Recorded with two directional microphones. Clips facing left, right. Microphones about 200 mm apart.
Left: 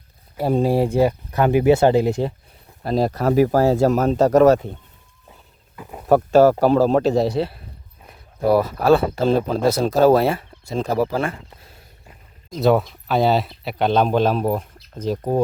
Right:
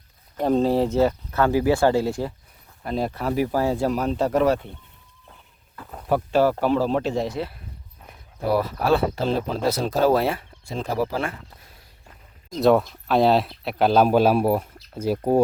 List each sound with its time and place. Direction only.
0.3 s speech: 10° left (ahead or behind)
2.8 s speech: 35° left (ahead or behind)
5.7 s a sound: 10° left (ahead or behind)
6.1 s speech: 45° left (ahead or behind)
8.4 s speech: 45° left (ahead or behind)
12.5 s speech: centre (ahead or behind)